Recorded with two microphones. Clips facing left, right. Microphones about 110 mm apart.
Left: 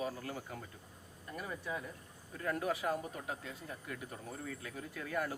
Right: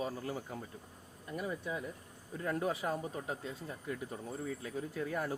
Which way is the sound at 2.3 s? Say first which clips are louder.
Right 1 dB; 25° right (ahead or behind).